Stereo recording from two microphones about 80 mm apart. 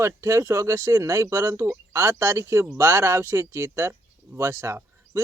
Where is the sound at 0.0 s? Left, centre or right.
Right.